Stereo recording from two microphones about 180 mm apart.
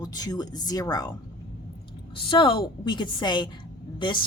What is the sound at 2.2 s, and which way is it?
Speech, 30° left (ahead or behind).